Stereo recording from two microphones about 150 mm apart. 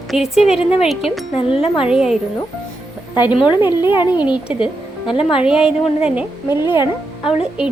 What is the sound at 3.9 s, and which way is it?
Speech, 30° left (ahead or behind).